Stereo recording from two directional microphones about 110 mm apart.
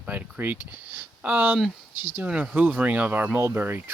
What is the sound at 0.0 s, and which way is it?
Speech, 15° right (ahead or behind).